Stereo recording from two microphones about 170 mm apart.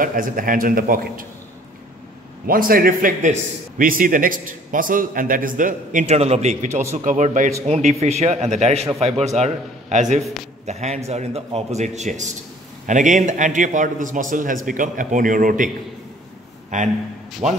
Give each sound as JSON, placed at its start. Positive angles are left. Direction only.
{"t": 0.0, "sound": "a man's voice", "side_deg": -55}
{"t": 2.4, "sound": "a man's voice", "side_deg": -55}
{"t": 17.4, "sound": "a man's voice", "side_deg": -40}